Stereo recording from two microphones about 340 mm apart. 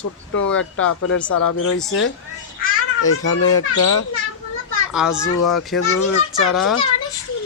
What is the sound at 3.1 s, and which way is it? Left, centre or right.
Speech, left.